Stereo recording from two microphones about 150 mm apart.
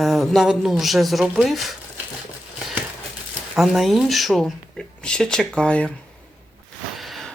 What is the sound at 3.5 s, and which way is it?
Speech, centre (ahead or behind).